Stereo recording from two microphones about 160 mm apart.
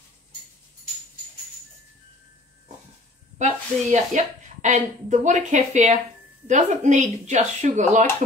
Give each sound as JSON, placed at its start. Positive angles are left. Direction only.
{"t": 3.3, "sound": "a woman's voice", "side_deg": -45}